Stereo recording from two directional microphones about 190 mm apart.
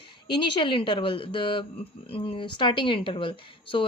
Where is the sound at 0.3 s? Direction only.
25° left (ahead or behind).